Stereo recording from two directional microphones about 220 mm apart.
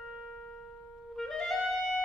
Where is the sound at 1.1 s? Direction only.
Centre (ahead or behind).